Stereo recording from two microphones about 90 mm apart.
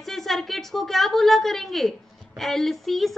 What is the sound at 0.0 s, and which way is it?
A woman's voice, 5° left (ahead or behind).